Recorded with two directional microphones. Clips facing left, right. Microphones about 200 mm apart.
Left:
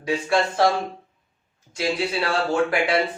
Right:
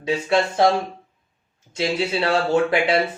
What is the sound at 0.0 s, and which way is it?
Speech, 20° right (ahead or behind).